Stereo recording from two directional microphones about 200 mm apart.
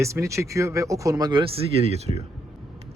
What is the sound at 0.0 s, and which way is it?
A man's voice, 15° right (ahead or behind).